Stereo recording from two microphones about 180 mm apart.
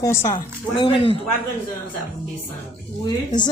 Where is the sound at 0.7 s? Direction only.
30° left (ahead or behind).